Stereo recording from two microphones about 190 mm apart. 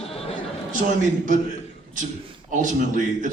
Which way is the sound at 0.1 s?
30° left (ahead or behind).